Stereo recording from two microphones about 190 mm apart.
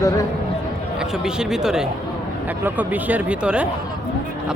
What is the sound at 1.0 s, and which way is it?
Speech, 5° right (ahead or behind).